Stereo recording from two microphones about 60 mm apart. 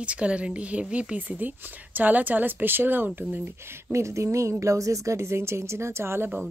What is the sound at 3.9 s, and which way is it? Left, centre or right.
Speech, right.